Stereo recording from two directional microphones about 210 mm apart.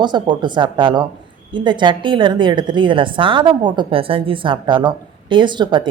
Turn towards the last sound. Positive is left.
turn(degrees=-20)  # may be behind; listen again after turning